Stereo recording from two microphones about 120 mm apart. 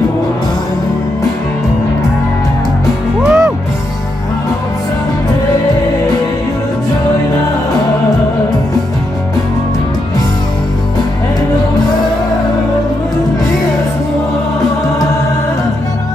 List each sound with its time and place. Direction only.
3.2 s music: 5° right (ahead or behind)